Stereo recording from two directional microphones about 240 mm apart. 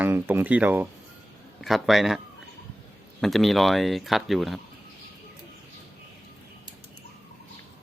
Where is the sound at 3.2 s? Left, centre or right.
Centre.